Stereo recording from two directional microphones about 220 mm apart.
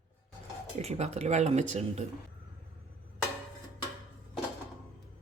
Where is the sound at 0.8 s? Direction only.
30° right (ahead or behind).